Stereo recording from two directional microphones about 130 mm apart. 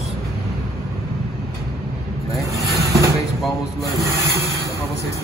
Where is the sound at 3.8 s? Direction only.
25° left (ahead or behind).